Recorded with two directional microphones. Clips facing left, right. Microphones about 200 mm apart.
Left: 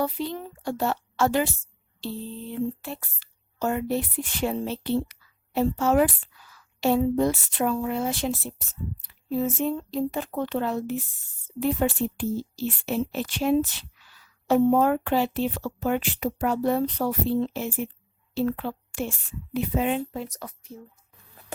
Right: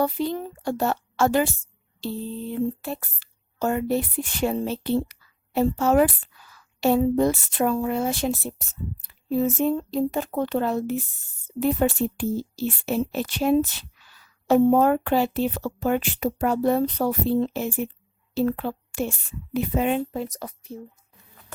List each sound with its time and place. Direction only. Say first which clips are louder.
0.0 s speech: right 4 dB; 45° right (ahead or behind)
2.8 s a woman's voice: right 4 dB; 45° right (ahead or behind)
20.3 s speech: right 4 dB; 30° right (ahead or behind)